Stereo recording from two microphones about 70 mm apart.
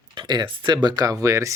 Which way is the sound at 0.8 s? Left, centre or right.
Right.